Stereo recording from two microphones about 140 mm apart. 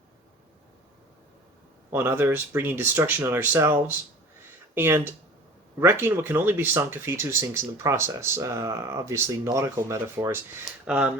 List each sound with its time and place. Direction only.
1.9 s speech: 15° right (ahead or behind)